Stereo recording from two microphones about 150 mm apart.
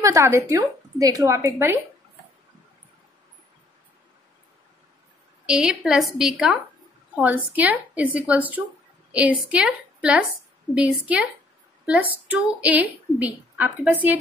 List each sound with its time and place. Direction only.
0.0 s a woman's voice: 20° right (ahead or behind)
5.5 s a woman's voice: 5° right (ahead or behind)